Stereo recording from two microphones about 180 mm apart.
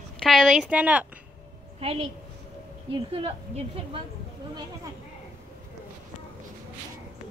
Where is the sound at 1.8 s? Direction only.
35° right (ahead or behind).